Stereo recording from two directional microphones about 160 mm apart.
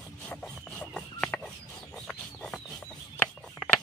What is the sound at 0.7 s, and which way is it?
Chicken, 5° left (ahead or behind).